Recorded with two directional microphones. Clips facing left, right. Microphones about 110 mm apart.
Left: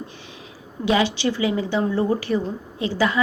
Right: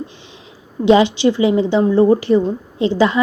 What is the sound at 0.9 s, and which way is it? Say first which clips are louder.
A woman's voice: right 8 dB; 25° right (ahead or behind).